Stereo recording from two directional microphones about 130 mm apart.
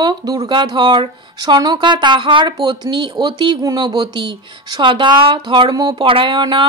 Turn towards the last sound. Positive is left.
turn(degrees=-40)  # may be behind; listen again after turning